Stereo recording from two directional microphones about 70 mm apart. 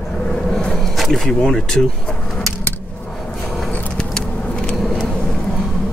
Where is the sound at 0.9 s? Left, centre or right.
Centre.